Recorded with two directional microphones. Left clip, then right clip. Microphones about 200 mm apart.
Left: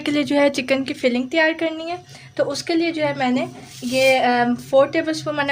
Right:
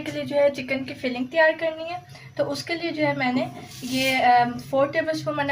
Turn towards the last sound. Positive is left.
turn(degrees=60)  # may be behind; listen again after turning